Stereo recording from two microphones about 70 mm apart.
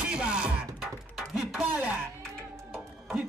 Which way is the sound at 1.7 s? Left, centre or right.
Right.